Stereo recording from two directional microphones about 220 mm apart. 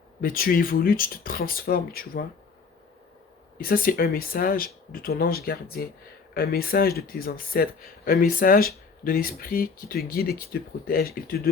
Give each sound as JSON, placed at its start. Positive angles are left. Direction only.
{"t": 0.2, "sound": "speech", "side_deg": 40}
{"t": 3.6, "sound": "speech", "side_deg": 40}